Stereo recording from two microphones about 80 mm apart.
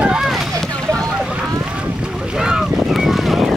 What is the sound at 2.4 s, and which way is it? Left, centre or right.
Boat, centre.